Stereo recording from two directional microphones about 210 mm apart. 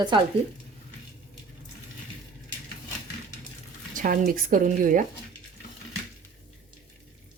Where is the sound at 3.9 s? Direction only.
40° right (ahead or behind).